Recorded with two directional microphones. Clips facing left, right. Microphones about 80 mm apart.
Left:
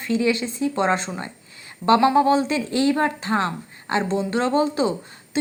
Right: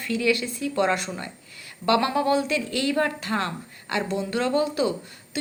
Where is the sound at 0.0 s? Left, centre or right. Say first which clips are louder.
Left 3 dB; left.